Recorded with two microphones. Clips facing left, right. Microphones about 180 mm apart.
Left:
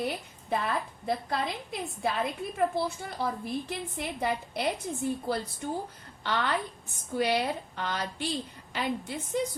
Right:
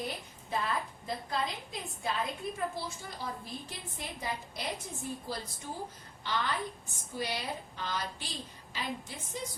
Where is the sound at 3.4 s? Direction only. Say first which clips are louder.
Left 10 dB; 60° left (ahead or behind).